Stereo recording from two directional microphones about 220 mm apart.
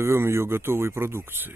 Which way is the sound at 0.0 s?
10° right (ahead or behind).